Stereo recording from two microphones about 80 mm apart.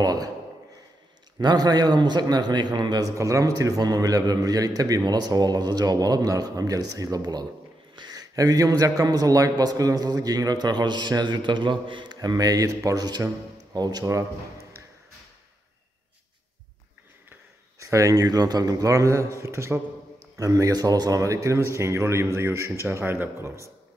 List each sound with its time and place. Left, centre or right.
0.0 s a sound: right
1.4 s a man's voice: right
3.2 s a man's voice: right
17.7 s a man's voice: right